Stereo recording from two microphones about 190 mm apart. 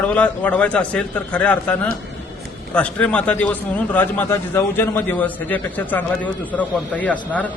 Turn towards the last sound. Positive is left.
turn(degrees=5)  # may be behind; listen again after turning